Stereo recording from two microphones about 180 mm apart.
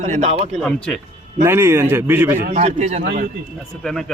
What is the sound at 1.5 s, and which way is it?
Speech, 15° right (ahead or behind).